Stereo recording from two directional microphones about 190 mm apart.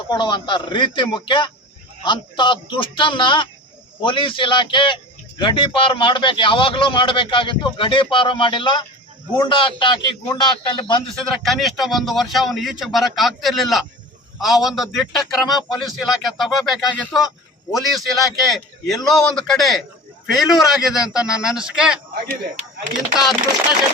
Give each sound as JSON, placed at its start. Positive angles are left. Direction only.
{"t": 0.1, "sound": "a man's voice", "side_deg": 25}
{"t": 11.3, "sound": "a man's voice", "side_deg": 0}
{"t": 17.2, "sound": "a sound", "side_deg": 15}
{"t": 17.9, "sound": "a man's voice", "side_deg": 0}